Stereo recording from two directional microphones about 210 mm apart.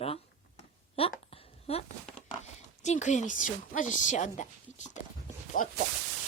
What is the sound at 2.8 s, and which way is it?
A woman's voice, 35° left (ahead or behind).